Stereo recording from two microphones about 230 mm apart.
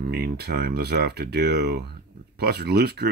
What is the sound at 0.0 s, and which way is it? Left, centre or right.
Speech, right.